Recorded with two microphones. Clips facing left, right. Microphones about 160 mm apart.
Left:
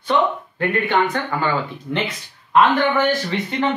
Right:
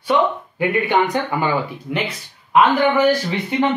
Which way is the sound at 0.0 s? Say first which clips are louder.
Right 1 dB; 10° right (ahead or behind).